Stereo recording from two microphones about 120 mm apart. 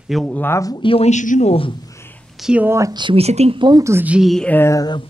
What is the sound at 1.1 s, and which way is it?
Speech, 85° left.